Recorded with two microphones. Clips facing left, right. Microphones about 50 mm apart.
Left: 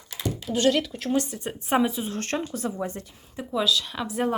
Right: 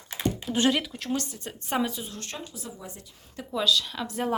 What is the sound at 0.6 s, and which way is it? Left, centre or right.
Speech, centre.